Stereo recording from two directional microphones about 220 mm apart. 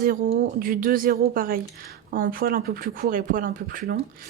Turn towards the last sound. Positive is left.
turn(degrees=-40)  # may be behind; listen again after turning